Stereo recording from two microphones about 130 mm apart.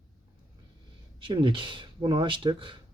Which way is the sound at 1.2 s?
40° right (ahead or behind).